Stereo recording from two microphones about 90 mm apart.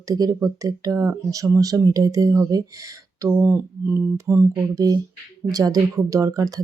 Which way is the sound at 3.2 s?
25° right (ahead or behind).